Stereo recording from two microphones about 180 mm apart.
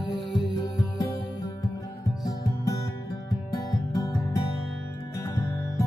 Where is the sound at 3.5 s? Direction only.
20° left (ahead or behind).